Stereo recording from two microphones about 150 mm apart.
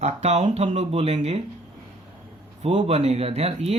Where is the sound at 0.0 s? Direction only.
50° right (ahead or behind).